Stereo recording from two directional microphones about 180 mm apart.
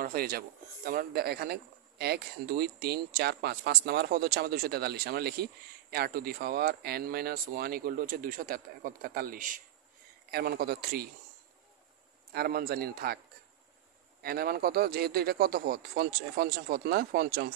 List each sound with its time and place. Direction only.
0.0 s speech: 55° right (ahead or behind)
10.3 s speech: 60° right (ahead or behind)
12.3 s speech: 60° right (ahead or behind)
14.2 s speech: 55° right (ahead or behind)